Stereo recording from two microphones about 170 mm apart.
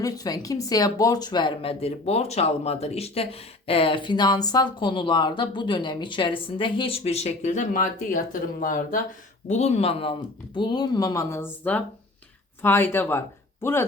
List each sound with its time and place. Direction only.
0.0 s speech: 20° left (ahead or behind); by 9.0 s 55° left (ahead or behind)
9.5 s speech: 40° left (ahead or behind); by 13.8 s 15° left (ahead or behind)